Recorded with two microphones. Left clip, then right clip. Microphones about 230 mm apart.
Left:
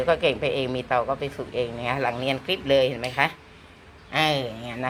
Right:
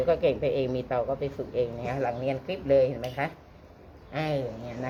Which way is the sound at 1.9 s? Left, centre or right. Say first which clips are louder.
Left 4 dB; centre.